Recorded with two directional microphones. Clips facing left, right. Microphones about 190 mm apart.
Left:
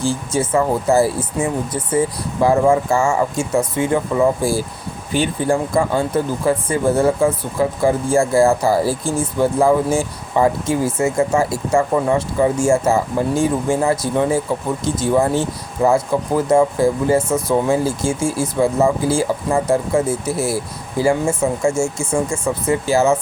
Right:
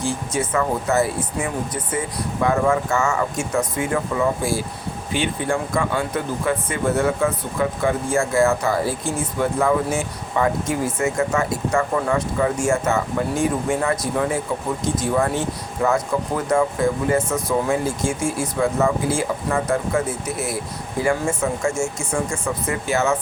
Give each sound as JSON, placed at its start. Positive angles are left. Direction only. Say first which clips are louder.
{"t": 0.3, "sound": "speech", "louder": "left 5 dB", "side_deg": 30}